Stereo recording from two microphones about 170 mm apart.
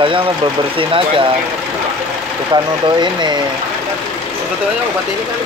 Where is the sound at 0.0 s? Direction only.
30° right (ahead or behind).